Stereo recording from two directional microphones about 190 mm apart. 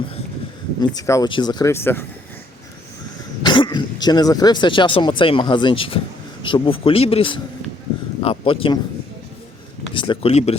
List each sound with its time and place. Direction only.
0.8 s speech: 15° left (ahead or behind)
3.4 s speech: 25° left (ahead or behind)
9.9 s speech: 25° left (ahead or behind)